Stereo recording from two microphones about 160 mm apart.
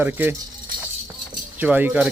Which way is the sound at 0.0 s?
15° right (ahead or behind).